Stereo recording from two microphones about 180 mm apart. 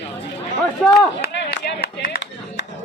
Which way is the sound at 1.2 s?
65° left (ahead or behind).